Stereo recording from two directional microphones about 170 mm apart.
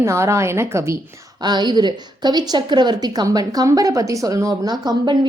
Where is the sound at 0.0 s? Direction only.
15° right (ahead or behind).